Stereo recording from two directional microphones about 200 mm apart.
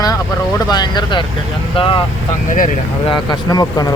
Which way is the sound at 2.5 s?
40° left (ahead or behind).